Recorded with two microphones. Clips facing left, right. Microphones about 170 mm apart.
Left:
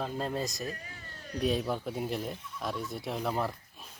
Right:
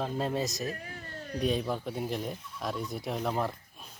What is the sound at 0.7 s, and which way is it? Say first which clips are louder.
Speech: right 4 dB; 55° right (ahead or behind).